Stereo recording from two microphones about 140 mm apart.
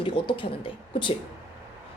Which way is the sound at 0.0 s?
35° left (ahead or behind).